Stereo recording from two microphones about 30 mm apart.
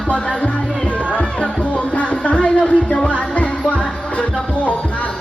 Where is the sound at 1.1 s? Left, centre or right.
Left.